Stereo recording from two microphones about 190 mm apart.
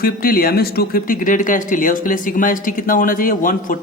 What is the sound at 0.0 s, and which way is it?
Speech, 50° left (ahead or behind).